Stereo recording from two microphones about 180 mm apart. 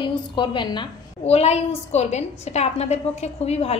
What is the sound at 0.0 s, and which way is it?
A woman's voice, 25° left (ahead or behind).